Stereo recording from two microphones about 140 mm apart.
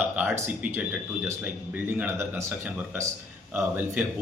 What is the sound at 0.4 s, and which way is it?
Speech, 10° right (ahead or behind).